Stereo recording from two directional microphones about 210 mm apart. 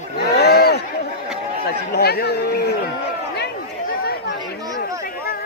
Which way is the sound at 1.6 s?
50° left (ahead or behind).